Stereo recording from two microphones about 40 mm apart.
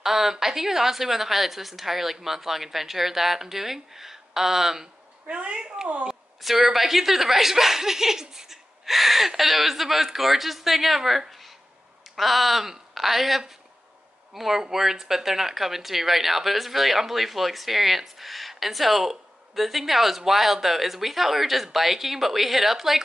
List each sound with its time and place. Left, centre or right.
0.0 s a woman's voice: centre
5.2 s speech: right
6.0 s speech: centre